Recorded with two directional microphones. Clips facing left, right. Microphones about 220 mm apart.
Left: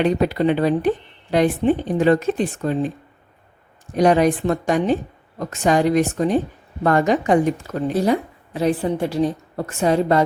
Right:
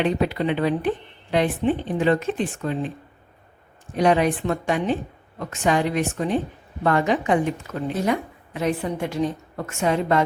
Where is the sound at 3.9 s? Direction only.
40° left (ahead or behind).